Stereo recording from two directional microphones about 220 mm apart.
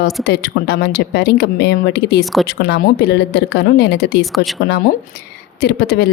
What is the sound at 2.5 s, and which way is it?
A woman's voice, 50° left (ahead or behind).